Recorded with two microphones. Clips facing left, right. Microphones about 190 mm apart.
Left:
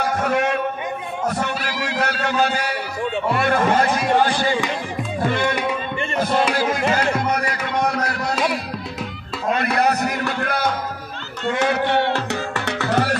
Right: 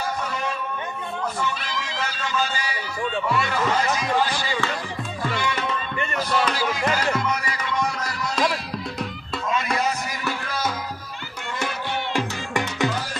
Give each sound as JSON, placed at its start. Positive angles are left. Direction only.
{"t": 0.0, "sound": "a sound", "side_deg": 70}
{"t": 1.7, "sound": "a man's voice", "side_deg": 65}
{"t": 5.2, "sound": "music", "side_deg": 55}
{"t": 6.5, "sound": "speech", "side_deg": 55}
{"t": 7.2, "sound": "music", "side_deg": 55}
{"t": 9.8, "sound": "music", "side_deg": 65}
{"t": 11.4, "sound": "a sound", "side_deg": 70}
{"t": 12.9, "sound": "music", "side_deg": 70}